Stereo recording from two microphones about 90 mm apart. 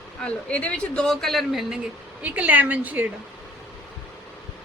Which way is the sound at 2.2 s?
15° right (ahead or behind).